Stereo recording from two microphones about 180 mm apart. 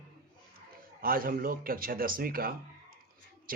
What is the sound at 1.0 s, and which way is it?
A man's voice, 55° right (ahead or behind).